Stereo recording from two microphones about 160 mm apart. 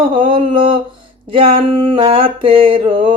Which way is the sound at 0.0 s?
30° right (ahead or behind).